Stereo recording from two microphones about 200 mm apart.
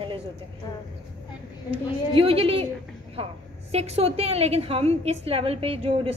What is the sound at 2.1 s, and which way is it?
Speech, 30° right (ahead or behind).